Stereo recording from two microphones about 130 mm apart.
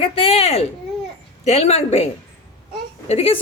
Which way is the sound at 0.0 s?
45° left (ahead or behind).